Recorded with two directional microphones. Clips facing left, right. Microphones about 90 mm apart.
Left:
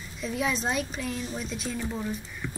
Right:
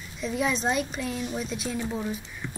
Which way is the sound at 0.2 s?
Centre (ahead or behind).